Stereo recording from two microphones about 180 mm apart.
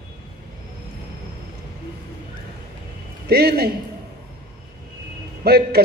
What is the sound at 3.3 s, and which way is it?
Speech, 65° right (ahead or behind).